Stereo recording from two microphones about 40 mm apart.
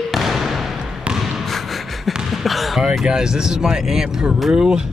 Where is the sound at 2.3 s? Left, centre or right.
Centre.